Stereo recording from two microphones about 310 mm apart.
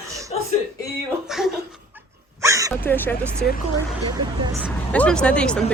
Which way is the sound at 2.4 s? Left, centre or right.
Centre.